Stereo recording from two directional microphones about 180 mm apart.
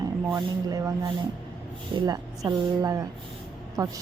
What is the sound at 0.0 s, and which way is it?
Speech, 20° right (ahead or behind).